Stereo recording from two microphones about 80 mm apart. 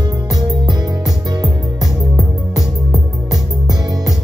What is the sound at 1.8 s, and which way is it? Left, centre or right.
Music, centre.